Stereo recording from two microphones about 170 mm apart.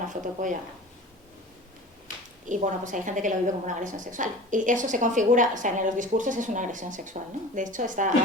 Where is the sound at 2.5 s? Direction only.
50° right (ahead or behind).